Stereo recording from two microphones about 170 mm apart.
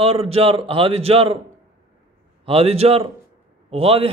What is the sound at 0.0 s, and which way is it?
A man's voice, 35° right (ahead or behind).